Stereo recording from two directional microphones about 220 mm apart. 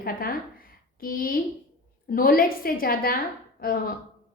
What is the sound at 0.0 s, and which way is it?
A woman's voice, 40° left (ahead or behind).